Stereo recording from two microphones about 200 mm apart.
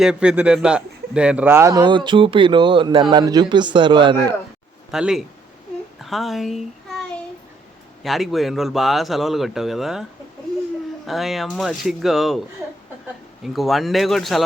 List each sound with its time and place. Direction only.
0.0 s a man's voice: 5° right (ahead or behind); by 4.4 s 25° right (ahead or behind)
4.9 s a man's voice: 5° right (ahead or behind)
8.0 s a man's voice: centre (ahead or behind)